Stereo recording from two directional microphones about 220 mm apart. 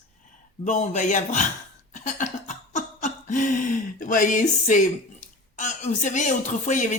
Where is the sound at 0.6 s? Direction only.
30° left (ahead or behind).